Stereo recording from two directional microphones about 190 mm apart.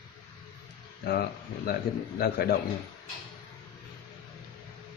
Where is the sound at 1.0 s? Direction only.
55° left (ahead or behind).